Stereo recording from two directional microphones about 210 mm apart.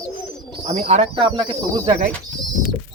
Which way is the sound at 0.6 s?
30° right (ahead or behind).